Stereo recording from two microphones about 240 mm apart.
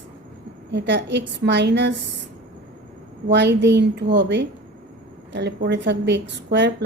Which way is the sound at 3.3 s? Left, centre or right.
Right.